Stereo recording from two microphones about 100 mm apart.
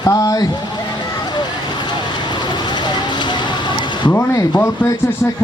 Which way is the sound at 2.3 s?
45° left (ahead or behind).